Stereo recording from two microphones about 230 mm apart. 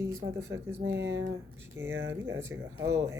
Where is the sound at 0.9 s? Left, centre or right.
Right.